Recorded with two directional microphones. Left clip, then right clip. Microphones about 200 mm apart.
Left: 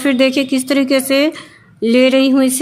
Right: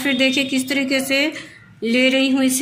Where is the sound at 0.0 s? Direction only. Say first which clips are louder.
Left 4 dB; 60° left (ahead or behind).